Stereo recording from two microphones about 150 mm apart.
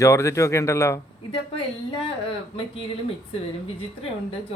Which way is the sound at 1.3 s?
35° left (ahead or behind).